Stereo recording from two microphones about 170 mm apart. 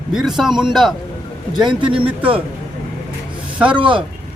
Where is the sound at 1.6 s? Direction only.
30° right (ahead or behind).